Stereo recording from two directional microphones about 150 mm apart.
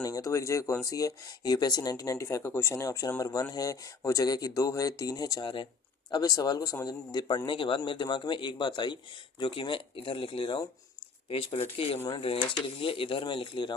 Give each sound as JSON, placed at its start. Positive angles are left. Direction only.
{"t": 0.0, "sound": "speech", "side_deg": 20}